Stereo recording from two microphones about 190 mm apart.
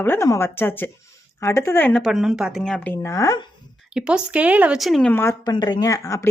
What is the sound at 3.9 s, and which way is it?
A woman's voice, 5° right (ahead or behind).